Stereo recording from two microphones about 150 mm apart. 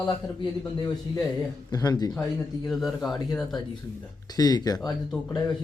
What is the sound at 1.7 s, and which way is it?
Speech, 25° left (ahead or behind).